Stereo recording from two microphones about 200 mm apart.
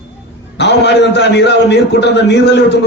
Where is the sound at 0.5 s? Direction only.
60° left (ahead or behind).